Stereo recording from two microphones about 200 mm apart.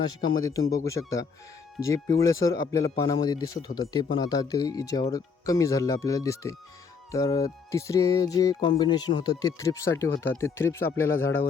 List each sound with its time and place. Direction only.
0.2 s speech: 20° left (ahead or behind)